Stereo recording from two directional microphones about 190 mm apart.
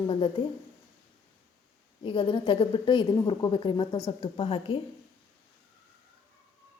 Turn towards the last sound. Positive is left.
turn(degrees=30)  # may be behind; listen again after turning